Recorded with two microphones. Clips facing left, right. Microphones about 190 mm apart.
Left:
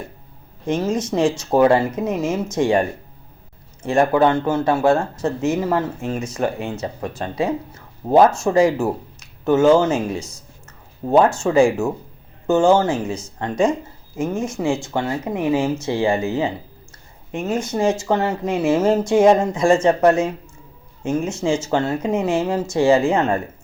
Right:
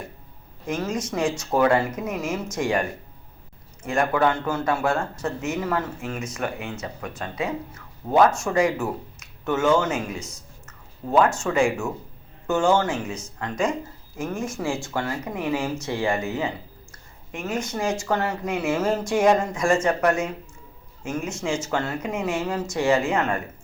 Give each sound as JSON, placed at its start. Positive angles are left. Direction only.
{"t": 0.7, "sound": "speech", "side_deg": 30}
{"t": 3.8, "sound": "speech", "side_deg": 30}
{"t": 14.2, "sound": "speech", "side_deg": 20}